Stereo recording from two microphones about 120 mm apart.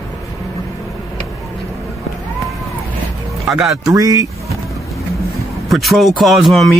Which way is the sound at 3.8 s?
30° right (ahead or behind).